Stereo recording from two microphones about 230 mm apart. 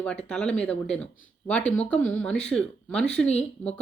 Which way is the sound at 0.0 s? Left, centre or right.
Centre.